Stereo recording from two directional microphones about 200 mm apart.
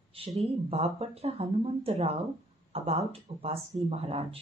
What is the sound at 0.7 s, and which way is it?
A woman's voice, 30° right (ahead or behind).